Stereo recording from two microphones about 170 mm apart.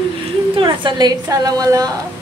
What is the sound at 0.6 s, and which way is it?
A woman's voice, 25° right (ahead or behind).